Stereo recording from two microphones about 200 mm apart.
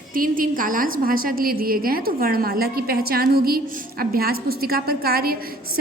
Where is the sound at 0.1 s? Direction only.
45° right (ahead or behind).